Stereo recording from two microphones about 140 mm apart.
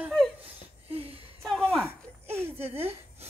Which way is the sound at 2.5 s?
15° right (ahead or behind).